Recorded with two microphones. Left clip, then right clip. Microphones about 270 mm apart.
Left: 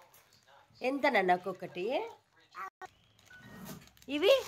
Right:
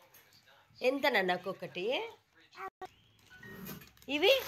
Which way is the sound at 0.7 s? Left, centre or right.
Centre.